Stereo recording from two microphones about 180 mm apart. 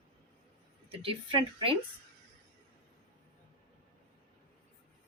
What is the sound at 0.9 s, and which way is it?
Speech, 30° right (ahead or behind).